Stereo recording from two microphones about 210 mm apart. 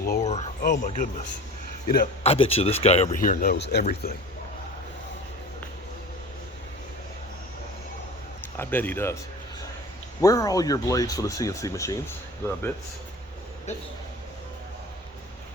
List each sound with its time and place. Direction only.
0.2 s a sound: 30° left (ahead or behind)
2.2 s speech: 30° left (ahead or behind); by 3.8 s 50° left (ahead or behind)
8.5 s speech: 10° left (ahead or behind)
10.2 s speech: 15° left (ahead or behind)
13.7 s speech: 30° left (ahead or behind)